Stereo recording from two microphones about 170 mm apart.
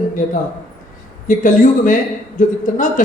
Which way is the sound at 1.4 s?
50° left (ahead or behind).